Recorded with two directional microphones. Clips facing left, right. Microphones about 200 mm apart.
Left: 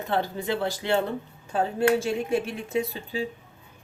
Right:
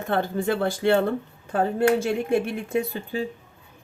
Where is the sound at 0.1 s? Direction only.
50° right (ahead or behind).